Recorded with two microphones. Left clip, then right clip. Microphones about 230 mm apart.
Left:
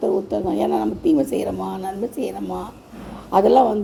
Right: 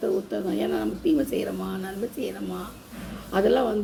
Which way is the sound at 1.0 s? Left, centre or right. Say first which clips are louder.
Left 5 dB; centre.